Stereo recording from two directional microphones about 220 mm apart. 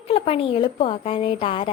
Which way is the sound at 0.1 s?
25° left (ahead or behind).